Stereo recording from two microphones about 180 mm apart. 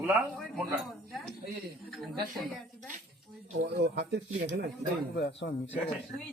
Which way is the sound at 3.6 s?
70° right (ahead or behind).